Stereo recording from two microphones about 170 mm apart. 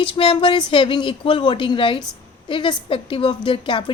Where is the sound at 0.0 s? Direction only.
30° left (ahead or behind).